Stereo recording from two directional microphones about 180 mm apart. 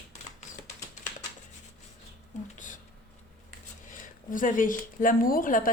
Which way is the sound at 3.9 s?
45° left (ahead or behind).